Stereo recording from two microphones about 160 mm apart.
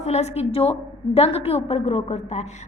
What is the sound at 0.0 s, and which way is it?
A woman's voice, 45° left (ahead or behind).